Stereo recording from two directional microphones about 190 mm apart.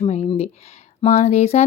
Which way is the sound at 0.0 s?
35° left (ahead or behind).